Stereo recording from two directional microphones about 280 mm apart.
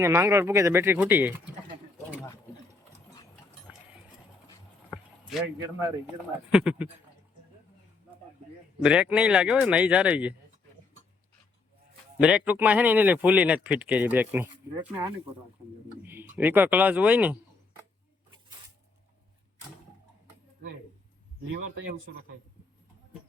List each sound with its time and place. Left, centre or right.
0.0 s speech: centre
3.7 s a sound: centre
4.9 s a sound: centre
6.5 s speech: centre
8.8 s speech: centre
12.2 s speech: centre
21.4 s speech: right